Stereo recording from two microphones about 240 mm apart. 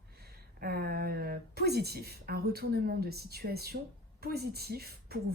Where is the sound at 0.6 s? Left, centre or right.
Right.